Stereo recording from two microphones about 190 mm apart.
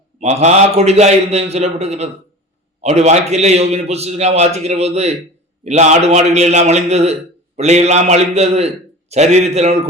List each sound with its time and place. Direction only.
0.2 s a man's voice: 35° right (ahead or behind)